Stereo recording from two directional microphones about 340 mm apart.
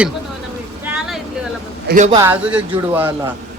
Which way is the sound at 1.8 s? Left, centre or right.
Right.